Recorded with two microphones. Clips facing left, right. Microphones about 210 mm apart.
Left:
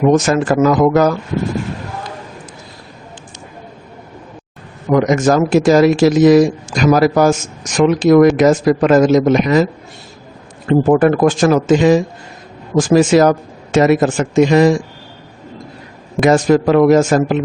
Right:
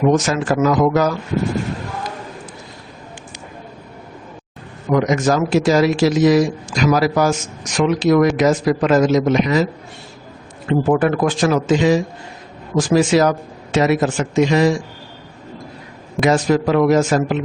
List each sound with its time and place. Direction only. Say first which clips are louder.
0.1 s a man's voice: left 4 dB; 50° left (ahead or behind)
4.9 s a man's voice: left 4 dB; 45° left (ahead or behind)
10.7 s a man's voice: left 5 dB; 45° left (ahead or behind)
16.2 s a man's voice: left 4 dB; 50° left (ahead or behind)